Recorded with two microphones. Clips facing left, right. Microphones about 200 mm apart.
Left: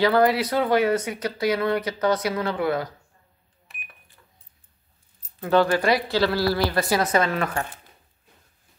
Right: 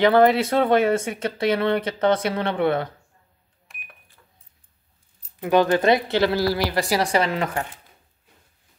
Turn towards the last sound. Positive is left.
turn(degrees=-20)  # may be behind; listen again after turning